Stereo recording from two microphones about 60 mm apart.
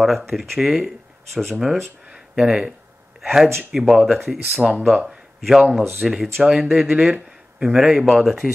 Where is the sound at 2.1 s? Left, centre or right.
Centre.